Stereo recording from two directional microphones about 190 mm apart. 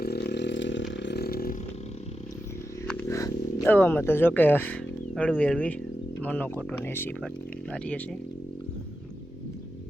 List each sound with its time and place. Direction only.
0.0 s chainsaw: 60° left (ahead or behind)
2.8 s a sound: 10° left (ahead or behind)
6.2 s speech: 10° left (ahead or behind)